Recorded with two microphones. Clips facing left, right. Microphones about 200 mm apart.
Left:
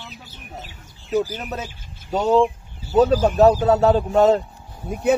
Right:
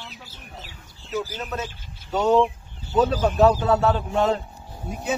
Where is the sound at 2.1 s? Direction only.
40° left (ahead or behind).